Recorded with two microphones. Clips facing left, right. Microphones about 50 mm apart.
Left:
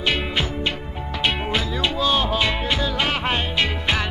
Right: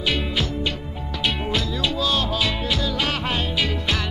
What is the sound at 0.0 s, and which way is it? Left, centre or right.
Music, centre.